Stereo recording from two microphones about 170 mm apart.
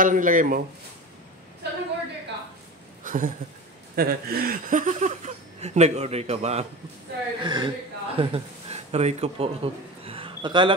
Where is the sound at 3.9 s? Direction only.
65° right (ahead or behind); by 6.7 s 40° right (ahead or behind).